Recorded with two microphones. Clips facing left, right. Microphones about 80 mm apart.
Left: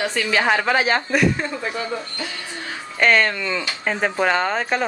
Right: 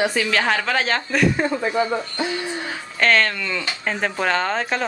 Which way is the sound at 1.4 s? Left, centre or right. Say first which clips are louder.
Right 5 dB; right.